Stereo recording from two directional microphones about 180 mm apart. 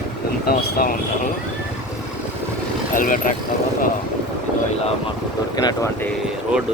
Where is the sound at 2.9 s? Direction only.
45° left (ahead or behind).